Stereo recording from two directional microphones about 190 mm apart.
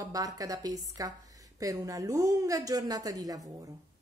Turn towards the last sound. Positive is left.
turn(degrees=-20)  # may be behind; listen again after turning